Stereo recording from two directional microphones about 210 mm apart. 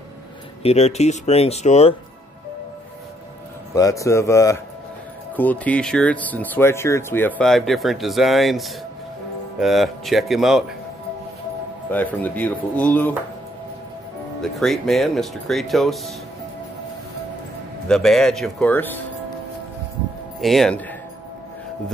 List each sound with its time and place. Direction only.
0.6 s speech: 30° left (ahead or behind)
3.7 s speech: 15° left (ahead or behind); by 10.6 s centre (ahead or behind)
11.9 s speech: 10° left (ahead or behind)
14.4 s speech: centre (ahead or behind)
17.8 s speech: centre (ahead or behind)
20.3 s speech: centre (ahead or behind)